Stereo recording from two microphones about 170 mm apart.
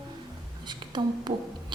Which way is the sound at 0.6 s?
25° right (ahead or behind).